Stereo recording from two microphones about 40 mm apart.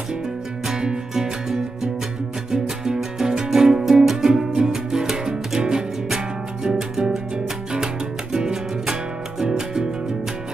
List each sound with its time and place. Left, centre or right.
0.7 s music: centre